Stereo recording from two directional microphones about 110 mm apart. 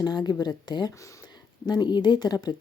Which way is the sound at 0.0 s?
40° left (ahead or behind).